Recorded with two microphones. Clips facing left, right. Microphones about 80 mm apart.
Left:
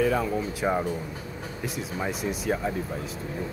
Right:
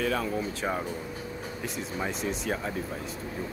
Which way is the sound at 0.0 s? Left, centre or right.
Centre.